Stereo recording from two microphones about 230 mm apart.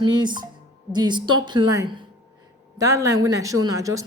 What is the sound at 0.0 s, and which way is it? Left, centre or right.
Speech, centre.